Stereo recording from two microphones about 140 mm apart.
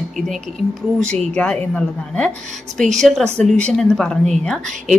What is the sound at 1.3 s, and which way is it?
A woman's voice, 5° left (ahead or behind).